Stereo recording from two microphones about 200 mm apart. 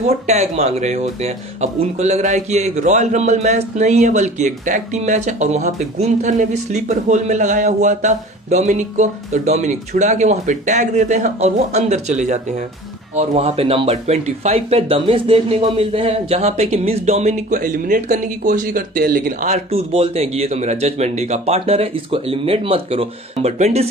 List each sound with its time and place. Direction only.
0.0 s speech: 30° right (ahead or behind)